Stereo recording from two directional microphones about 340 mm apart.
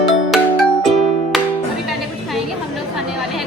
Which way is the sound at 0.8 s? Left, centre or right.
Centre.